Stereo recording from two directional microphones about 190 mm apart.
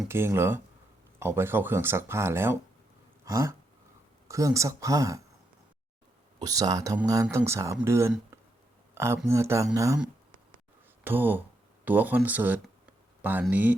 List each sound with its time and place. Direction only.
0.1 s speech: 15° right (ahead or behind)
3.2 s a sound: 15° right (ahead or behind)
4.3 s speech: 15° right (ahead or behind)
6.4 s speech: 20° right (ahead or behind)
9.3 s speech: 15° right (ahead or behind)
11.0 s speech: 10° right (ahead or behind)